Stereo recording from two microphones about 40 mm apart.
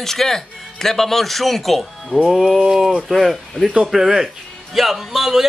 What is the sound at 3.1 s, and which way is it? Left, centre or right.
A man's voice, centre.